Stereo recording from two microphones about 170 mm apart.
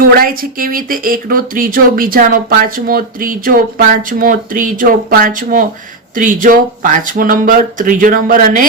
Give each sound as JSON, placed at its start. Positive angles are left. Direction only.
{"t": 0.0, "sound": "speech", "side_deg": -60}